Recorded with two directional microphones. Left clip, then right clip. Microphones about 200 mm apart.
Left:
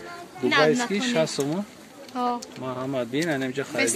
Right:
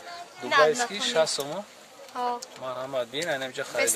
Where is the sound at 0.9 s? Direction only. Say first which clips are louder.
Even; 10° right (ahead or behind).